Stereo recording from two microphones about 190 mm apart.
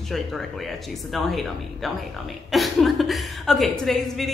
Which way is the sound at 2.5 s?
Centre (ahead or behind).